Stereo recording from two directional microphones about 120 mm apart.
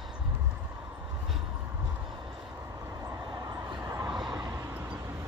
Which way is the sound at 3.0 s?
30° right (ahead or behind).